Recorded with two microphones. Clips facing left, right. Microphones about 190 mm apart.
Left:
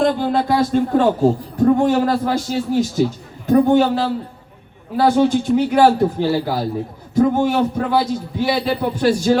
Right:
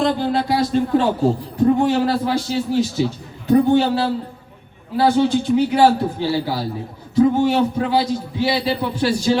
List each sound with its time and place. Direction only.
0.0 s speech: 50° left (ahead or behind)